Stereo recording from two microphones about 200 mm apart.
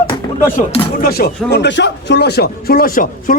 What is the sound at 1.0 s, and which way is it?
Speech, 50° left (ahead or behind).